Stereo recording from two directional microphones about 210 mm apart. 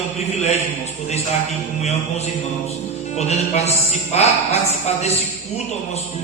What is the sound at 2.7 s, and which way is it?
Music, 30° left (ahead or behind).